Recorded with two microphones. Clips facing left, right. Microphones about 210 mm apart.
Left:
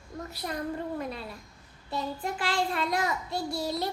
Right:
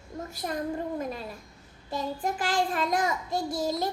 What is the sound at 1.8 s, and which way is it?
A child's voice, 45° right (ahead or behind).